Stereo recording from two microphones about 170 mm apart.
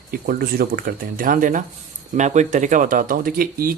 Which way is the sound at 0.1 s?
60° right (ahead or behind).